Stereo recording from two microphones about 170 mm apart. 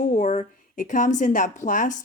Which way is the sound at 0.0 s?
45° left (ahead or behind).